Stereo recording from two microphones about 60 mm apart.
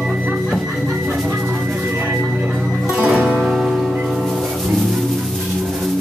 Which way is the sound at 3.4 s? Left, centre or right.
Centre.